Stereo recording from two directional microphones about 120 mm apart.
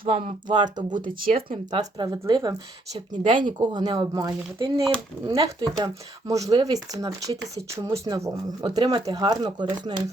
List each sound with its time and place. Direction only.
0.0 s speech: 50° right (ahead or behind)
2.0 s speech: 30° right (ahead or behind)
3.2 s speech: 40° right (ahead or behind)